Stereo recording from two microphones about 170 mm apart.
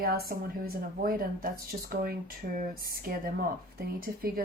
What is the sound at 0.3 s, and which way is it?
Speech, 60° right (ahead or behind).